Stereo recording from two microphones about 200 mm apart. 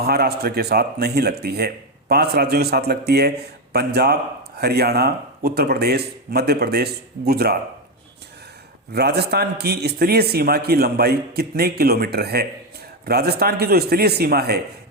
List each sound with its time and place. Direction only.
0.0 s speech: 55° right (ahead or behind)
8.9 s speech: 55° right (ahead or behind)